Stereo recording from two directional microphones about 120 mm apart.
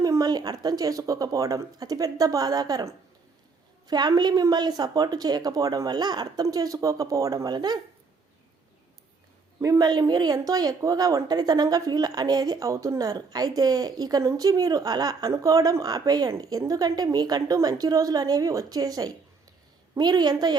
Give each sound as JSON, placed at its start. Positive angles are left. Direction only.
{"t": 0.0, "sound": "a woman's voice", "side_deg": -30}
{"t": 9.6, "sound": "a woman's voice", "side_deg": -30}